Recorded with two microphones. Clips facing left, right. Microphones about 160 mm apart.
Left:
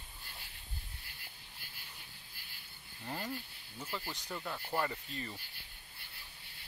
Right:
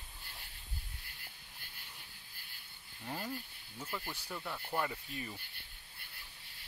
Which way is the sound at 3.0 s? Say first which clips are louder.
Even; centre (ahead or behind).